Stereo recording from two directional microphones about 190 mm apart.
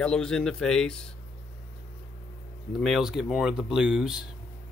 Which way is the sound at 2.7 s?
Centre (ahead or behind).